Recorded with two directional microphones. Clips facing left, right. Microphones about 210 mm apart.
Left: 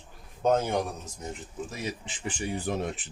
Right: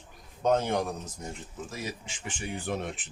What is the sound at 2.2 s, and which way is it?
Speech, 40° left (ahead or behind).